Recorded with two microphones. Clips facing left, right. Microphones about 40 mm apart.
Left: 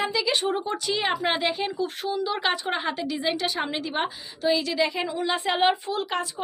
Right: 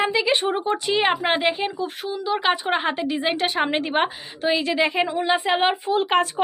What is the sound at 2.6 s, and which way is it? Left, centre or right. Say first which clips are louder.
A woman's voice: right 5 dB; right.